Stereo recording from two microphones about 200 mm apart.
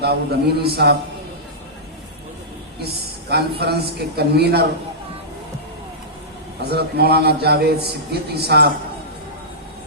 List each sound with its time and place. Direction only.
0.0 s a man's voice: 55° right (ahead or behind)
2.8 s a man's voice: 55° right (ahead or behind)
6.6 s a man's voice: 55° right (ahead or behind)